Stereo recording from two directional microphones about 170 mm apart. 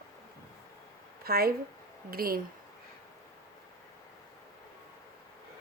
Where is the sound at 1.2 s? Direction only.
60° right (ahead or behind).